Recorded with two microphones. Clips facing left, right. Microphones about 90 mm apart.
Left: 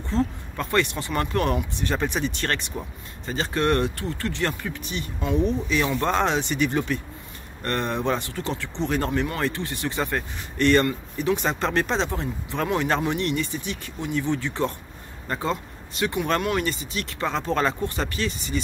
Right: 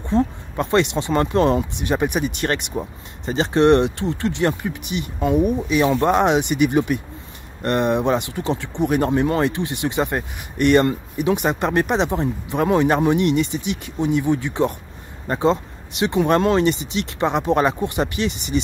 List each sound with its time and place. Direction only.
0.0 s speech: 20° right (ahead or behind)